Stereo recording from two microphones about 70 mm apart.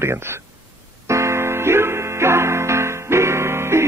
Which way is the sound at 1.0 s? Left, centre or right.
Right.